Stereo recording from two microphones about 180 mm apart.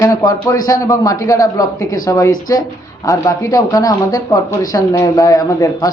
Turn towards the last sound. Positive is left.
turn(degrees=20)  # may be behind; listen again after turning